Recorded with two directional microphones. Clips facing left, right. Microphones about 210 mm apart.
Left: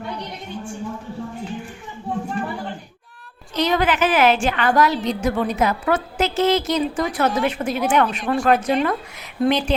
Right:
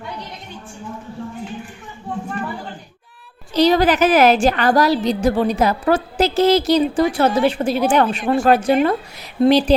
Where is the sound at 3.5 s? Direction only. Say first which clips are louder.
Right 5 dB; 35° right (ahead or behind).